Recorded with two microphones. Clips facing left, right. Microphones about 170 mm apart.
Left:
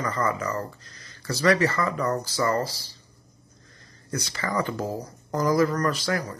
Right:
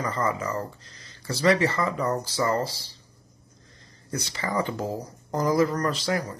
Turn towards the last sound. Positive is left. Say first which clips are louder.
# even
turn(degrees=-25)  # may be behind; listen again after turning